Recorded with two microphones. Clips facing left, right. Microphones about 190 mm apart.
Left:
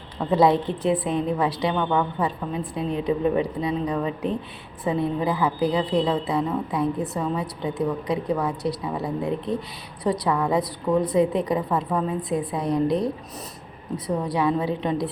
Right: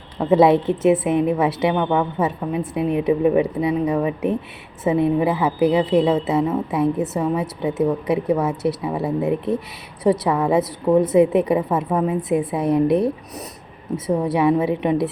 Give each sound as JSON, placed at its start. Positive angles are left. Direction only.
{"t": 0.3, "sound": "a woman's voice", "side_deg": -20}